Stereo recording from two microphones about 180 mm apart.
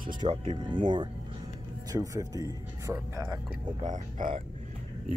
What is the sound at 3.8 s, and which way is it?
Speech, 40° right (ahead or behind).